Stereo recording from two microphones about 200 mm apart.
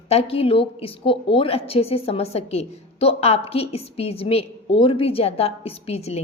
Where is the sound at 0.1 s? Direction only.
30° left (ahead or behind).